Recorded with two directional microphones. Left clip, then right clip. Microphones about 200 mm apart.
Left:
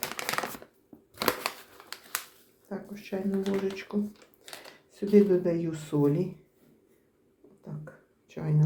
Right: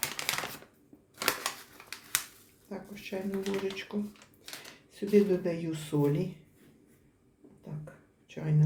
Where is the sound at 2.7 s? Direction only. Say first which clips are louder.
Left 3 dB; 20° left (ahead or behind).